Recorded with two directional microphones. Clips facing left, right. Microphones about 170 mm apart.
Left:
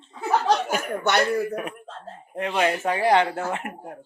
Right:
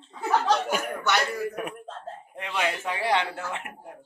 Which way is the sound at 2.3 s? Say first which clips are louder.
Left 6 dB; 45° left (ahead or behind).